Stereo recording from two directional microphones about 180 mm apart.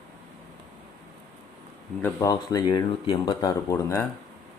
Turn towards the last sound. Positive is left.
turn(degrees=15)  # may be behind; listen again after turning